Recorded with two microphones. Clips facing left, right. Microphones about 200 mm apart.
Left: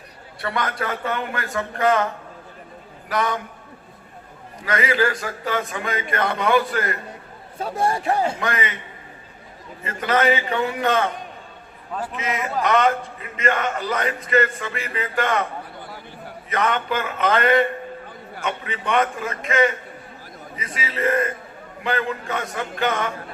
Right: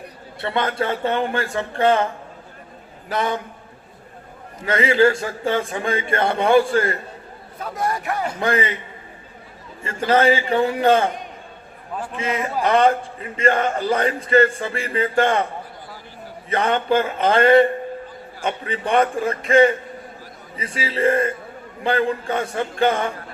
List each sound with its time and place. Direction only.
0.4 s a man's voice: 25° right (ahead or behind)
3.1 s a man's voice: 25° right (ahead or behind)
4.6 s a man's voice: 25° right (ahead or behind)
7.6 s speech: 30° left (ahead or behind)
8.4 s a man's voice: 30° right (ahead or behind)
9.8 s a man's voice: 30° right (ahead or behind)
12.1 s a man's voice: 30° right (ahead or behind)
16.5 s a man's voice: 30° right (ahead or behind)